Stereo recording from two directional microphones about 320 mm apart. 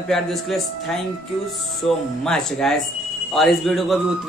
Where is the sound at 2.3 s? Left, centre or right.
Centre.